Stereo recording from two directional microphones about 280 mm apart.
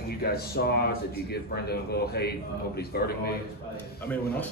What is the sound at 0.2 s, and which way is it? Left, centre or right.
A man's voice, left.